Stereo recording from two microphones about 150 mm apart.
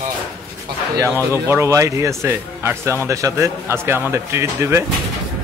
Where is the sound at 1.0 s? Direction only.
15° right (ahead or behind).